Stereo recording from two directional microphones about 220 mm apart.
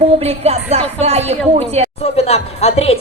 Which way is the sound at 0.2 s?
30° right (ahead or behind).